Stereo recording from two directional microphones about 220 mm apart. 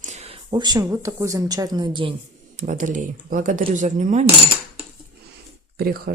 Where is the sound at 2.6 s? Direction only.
35° right (ahead or behind).